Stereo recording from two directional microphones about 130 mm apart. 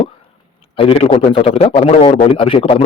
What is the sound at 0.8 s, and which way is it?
A man's voice, 45° left (ahead or behind).